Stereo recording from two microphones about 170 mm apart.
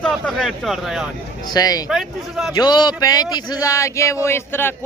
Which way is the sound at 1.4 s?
20° left (ahead or behind).